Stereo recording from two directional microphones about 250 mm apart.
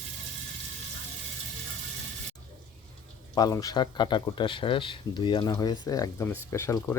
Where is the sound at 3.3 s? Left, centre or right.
Centre.